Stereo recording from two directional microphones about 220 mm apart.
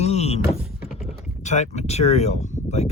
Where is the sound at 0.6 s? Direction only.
5° right (ahead or behind).